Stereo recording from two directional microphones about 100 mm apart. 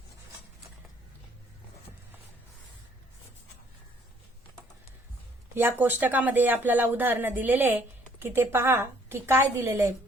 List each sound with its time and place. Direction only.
5.5 s speech: 20° right (ahead or behind)